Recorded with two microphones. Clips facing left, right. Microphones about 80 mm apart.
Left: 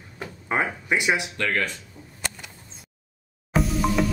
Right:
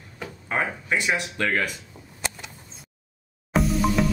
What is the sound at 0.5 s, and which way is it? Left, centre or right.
Speech, centre.